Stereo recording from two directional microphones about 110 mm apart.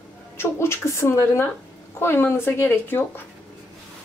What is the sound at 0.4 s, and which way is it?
A woman's voice, 25° left (ahead or behind).